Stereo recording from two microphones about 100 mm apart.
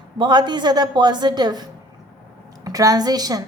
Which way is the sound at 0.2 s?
50° right (ahead or behind).